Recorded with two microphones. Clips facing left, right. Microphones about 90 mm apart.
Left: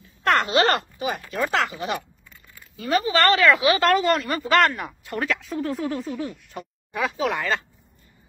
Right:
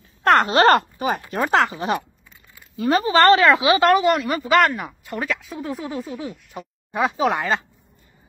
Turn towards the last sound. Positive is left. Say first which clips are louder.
# right 4 dB
turn(degrees=-25)  # may be behind; listen again after turning